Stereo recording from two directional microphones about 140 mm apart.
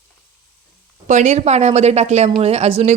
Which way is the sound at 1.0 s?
60° right (ahead or behind).